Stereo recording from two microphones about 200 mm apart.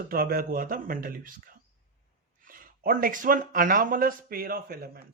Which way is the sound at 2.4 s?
45° right (ahead or behind).